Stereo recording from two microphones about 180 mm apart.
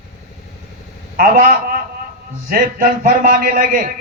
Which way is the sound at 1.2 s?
50° right (ahead or behind).